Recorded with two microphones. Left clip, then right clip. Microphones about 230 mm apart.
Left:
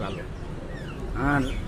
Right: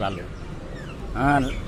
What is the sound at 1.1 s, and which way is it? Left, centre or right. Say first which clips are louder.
Speech: right 5 dB; right.